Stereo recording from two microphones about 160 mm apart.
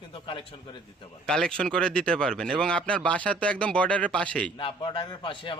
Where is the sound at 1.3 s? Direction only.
5° left (ahead or behind).